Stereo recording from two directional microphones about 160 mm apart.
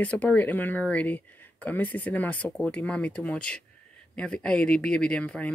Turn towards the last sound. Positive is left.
turn(degrees=5)  # may be behind; listen again after turning